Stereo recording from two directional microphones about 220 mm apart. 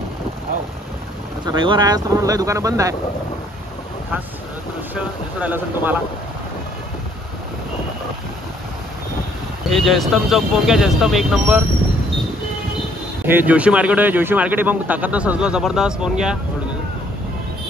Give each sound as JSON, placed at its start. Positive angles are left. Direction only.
{"t": 1.5, "sound": "speech", "side_deg": -20}
{"t": 4.9, "sound": "speech", "side_deg": -5}
{"t": 9.7, "sound": "speech", "side_deg": 0}
{"t": 13.3, "sound": "speech", "side_deg": -5}